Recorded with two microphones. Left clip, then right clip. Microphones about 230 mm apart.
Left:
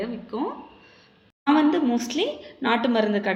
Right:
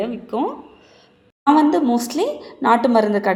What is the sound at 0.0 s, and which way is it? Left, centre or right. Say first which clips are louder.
A woman's voice: right 7 dB; right.